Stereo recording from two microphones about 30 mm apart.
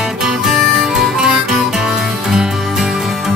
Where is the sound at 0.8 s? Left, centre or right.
Centre.